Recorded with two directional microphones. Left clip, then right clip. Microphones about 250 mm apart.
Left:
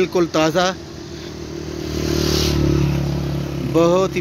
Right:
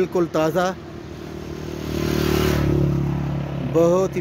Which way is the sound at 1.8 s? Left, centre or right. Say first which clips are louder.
Left 2 dB; right.